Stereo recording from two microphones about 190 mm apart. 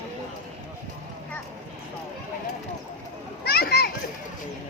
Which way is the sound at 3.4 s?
55° left (ahead or behind).